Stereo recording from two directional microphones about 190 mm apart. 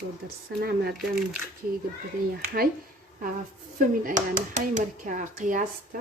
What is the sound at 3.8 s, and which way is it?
Speech, 45° right (ahead or behind).